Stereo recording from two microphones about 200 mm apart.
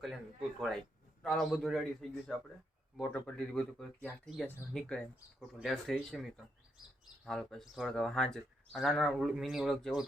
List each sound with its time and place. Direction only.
1.2 s speech: centre (ahead or behind)